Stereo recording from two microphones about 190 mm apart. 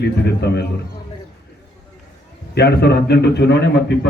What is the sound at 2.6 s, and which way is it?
A man's voice, 60° left (ahead or behind).